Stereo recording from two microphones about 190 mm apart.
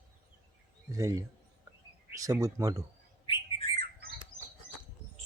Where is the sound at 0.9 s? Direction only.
15° right (ahead or behind).